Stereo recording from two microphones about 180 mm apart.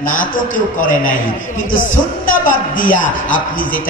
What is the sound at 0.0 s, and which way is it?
A man's voice, 50° left (ahead or behind).